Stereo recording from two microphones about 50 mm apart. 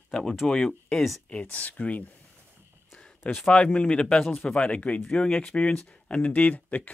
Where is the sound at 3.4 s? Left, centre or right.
Left.